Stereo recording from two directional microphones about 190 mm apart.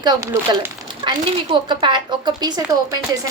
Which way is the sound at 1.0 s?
25° right (ahead or behind).